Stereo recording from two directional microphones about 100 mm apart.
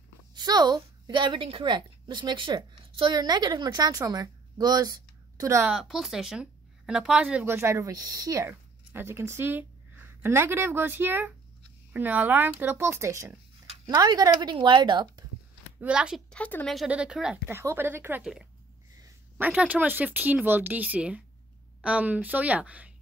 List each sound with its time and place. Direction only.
0.3 s a woman's voice: 45° right (ahead or behind)
5.7 s speech: centre (ahead or behind)
7.4 s speech: 25° right (ahead or behind)
13.8 s a woman's voice: 40° right (ahead or behind)
15.8 s speech: 10° right (ahead or behind)
16.3 s speech: 15° left (ahead or behind)
16.6 s speech: centre (ahead or behind)
17.5 s speech: 25° right (ahead or behind)
18.2 s speech: 5° right (ahead or behind)